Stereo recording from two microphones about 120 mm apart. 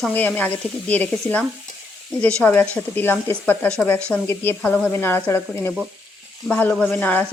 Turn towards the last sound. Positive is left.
turn(degrees=15)  # may be behind; listen again after turning